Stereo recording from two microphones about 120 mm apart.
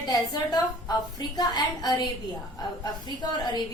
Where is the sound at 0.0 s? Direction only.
35° left (ahead or behind).